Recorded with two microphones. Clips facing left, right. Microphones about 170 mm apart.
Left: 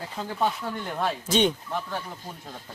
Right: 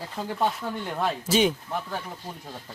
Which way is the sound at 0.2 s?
Centre (ahead or behind).